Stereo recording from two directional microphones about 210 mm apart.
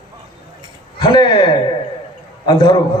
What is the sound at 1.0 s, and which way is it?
A man's voice, 20° left (ahead or behind).